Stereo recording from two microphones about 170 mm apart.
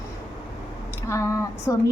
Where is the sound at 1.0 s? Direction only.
15° left (ahead or behind).